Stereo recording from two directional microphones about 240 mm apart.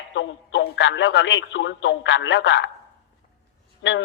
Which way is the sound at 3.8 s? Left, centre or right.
Left.